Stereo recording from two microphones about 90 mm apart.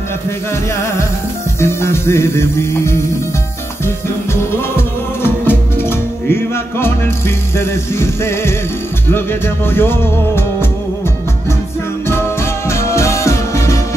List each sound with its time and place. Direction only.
1.6 s music: 30° left (ahead or behind)
12.1 s music: 30° left (ahead or behind)